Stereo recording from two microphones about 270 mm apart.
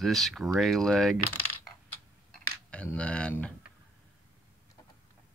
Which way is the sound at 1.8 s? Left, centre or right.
Centre.